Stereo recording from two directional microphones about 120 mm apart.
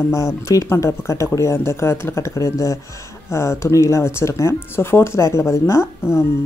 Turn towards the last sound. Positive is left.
turn(degrees=20)  # may be behind; listen again after turning